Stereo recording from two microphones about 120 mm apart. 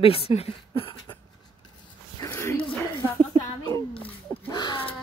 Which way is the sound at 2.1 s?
25° left (ahead or behind).